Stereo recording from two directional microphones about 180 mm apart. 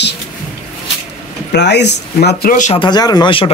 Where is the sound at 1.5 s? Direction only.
70° left (ahead or behind).